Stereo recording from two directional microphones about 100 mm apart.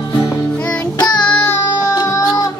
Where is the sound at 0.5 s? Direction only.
15° left (ahead or behind).